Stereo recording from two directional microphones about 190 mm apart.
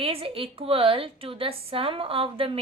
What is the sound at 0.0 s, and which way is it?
A woman's voice, 30° right (ahead or behind).